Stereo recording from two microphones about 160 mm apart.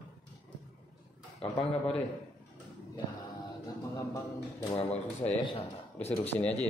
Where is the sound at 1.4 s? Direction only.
40° left (ahead or behind).